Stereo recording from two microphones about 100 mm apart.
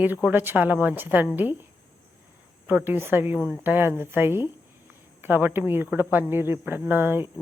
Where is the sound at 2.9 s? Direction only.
20° right (ahead or behind).